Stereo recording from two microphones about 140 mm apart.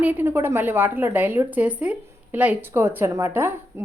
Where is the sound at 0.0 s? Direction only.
15° right (ahead or behind).